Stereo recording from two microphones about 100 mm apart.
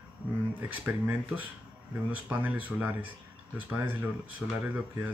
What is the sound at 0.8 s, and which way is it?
Speech, 20° right (ahead or behind).